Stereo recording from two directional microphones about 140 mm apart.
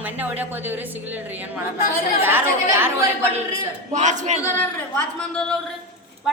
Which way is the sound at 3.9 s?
60° right (ahead or behind).